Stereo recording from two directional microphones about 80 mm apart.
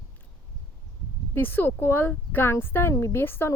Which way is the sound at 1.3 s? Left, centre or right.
Left.